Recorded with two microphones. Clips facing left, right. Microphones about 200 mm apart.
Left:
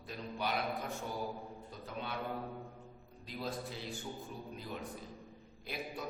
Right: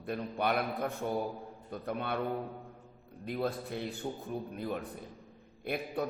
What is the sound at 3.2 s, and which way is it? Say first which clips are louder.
Mantra: right 7 dB; 60° right (ahead or behind).